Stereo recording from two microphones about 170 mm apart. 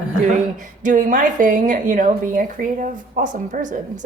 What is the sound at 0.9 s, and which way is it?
A woman's voice, 50° right (ahead or behind).